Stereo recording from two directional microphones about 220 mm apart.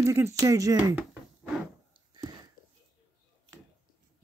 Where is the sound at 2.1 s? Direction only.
20° right (ahead or behind).